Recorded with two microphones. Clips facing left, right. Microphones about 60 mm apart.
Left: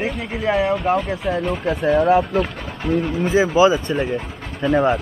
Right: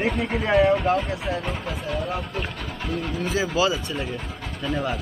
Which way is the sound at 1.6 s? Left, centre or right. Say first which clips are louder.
Left 12 dB; left.